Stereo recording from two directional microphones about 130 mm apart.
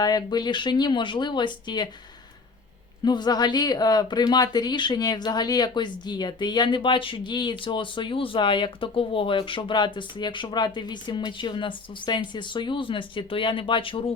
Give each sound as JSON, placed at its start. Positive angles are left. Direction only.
{"t": 0.0, "sound": "a woman's voice", "side_deg": 30}
{"t": 3.0, "sound": "a woman's voice", "side_deg": 35}